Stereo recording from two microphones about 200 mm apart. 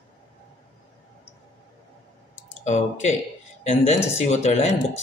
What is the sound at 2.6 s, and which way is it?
Speech, 35° left (ahead or behind).